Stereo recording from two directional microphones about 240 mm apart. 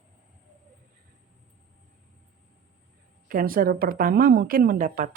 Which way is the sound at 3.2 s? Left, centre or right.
Right.